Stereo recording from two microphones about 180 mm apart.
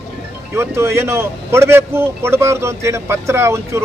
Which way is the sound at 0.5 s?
15° right (ahead or behind).